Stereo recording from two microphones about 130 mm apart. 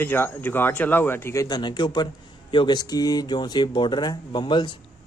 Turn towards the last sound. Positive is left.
turn(degrees=35)  # may be behind; listen again after turning